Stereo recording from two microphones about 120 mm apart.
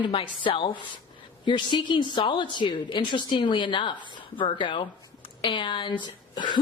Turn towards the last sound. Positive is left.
turn(degrees=40)  # may be behind; listen again after turning